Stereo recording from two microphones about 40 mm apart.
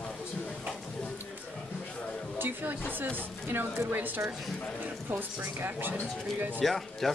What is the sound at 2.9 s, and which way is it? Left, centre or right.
Speech, right.